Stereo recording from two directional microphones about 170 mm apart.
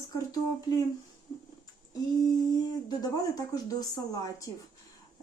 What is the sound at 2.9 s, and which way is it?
Speech, 20° left (ahead or behind).